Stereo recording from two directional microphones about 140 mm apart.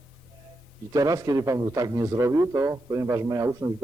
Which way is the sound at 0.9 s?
25° right (ahead or behind).